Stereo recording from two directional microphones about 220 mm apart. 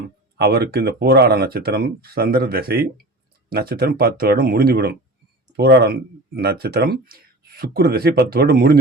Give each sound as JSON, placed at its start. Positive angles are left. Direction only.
{"t": 0.3, "sound": "speech", "side_deg": -45}